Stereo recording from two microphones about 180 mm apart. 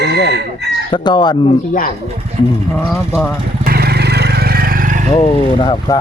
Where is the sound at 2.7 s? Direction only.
5° left (ahead or behind).